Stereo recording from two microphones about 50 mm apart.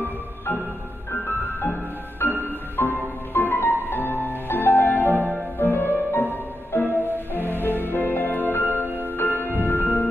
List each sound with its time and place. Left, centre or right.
1.2 s music: left
8.8 s music: right
9.1 s music: left